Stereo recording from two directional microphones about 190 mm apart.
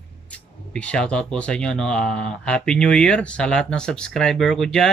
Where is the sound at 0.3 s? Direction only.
5° left (ahead or behind).